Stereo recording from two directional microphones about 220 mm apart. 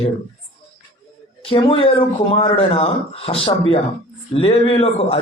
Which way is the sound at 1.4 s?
25° left (ahead or behind).